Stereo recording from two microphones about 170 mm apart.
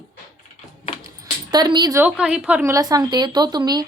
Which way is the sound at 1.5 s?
25° right (ahead or behind).